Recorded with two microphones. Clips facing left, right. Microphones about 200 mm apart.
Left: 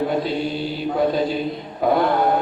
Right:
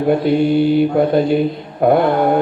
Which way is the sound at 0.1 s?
60° right (ahead or behind).